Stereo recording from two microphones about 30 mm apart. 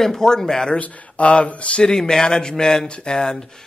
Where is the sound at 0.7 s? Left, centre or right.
Left.